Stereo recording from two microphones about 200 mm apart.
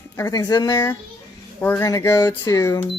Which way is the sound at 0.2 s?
20° left (ahead or behind).